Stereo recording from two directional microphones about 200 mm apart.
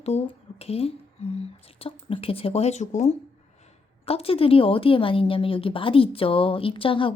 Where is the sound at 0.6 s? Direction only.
30° left (ahead or behind).